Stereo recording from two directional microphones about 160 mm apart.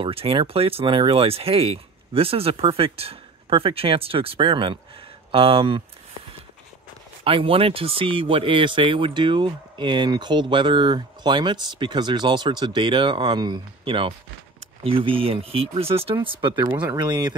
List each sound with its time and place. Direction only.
0.0 s speech: 35° right (ahead or behind)
7.2 s speech: 35° right (ahead or behind)